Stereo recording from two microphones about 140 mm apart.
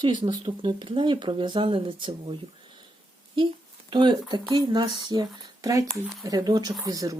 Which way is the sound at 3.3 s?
35° right (ahead or behind).